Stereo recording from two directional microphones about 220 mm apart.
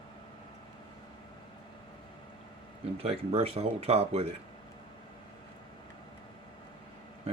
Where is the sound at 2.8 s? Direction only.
25° right (ahead or behind).